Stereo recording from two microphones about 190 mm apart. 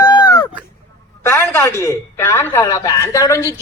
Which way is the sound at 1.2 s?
15° left (ahead or behind).